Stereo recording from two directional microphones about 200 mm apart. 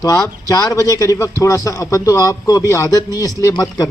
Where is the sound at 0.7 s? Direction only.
15° left (ahead or behind).